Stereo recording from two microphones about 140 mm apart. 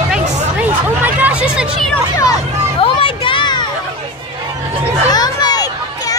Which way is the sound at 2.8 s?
35° left (ahead or behind).